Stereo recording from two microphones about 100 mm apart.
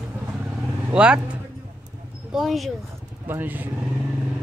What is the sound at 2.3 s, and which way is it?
Speech, centre (ahead or behind).